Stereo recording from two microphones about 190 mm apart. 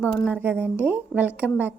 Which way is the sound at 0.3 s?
10° right (ahead or behind).